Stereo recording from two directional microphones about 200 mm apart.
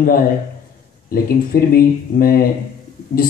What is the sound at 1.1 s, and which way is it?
Speech, 45° left (ahead or behind).